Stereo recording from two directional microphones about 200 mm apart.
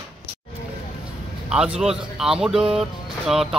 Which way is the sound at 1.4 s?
5° right (ahead or behind).